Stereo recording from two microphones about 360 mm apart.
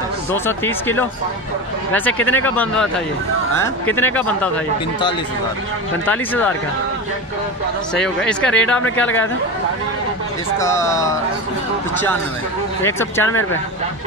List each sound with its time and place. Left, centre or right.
0.3 s speech: centre
6.0 s speech: centre
7.9 s speech: centre
10.6 s speech: centre
12.8 s speech: centre
13.3 s speech: left